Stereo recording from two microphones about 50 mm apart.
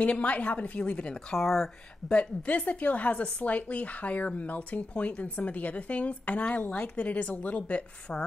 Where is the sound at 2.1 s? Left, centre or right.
Left.